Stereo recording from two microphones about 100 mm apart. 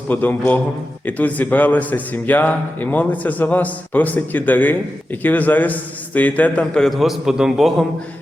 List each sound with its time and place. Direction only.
0.1 s a man's voice: 15° left (ahead or behind); by 7.9 s 5° right (ahead or behind)